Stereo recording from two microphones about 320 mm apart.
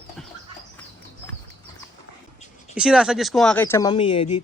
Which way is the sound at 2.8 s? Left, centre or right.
Centre.